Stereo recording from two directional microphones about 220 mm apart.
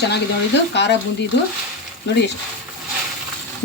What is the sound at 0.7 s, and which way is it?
Speech, 55° left (ahead or behind).